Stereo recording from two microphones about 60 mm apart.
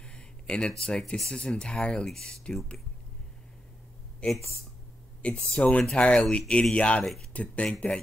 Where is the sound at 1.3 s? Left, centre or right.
Centre.